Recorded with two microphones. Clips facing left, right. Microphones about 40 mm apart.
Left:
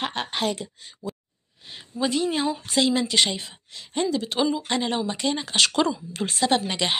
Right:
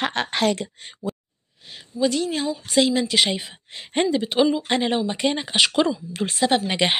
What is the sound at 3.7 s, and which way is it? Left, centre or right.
Speech, right.